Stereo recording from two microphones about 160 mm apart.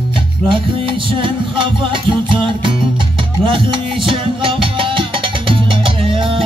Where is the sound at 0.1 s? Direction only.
30° right (ahead or behind).